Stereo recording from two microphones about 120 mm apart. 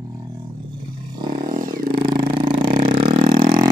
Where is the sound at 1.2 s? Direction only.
90° right.